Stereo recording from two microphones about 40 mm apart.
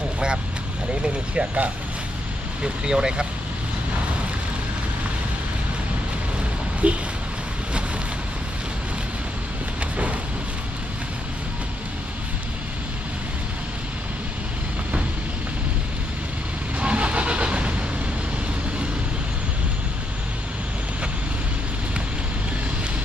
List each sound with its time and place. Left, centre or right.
1.0 s speech: right
6.8 s speech: right
16.8 s vehicle: right